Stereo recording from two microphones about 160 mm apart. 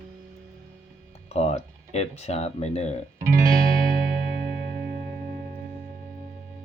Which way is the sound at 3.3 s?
55° right (ahead or behind).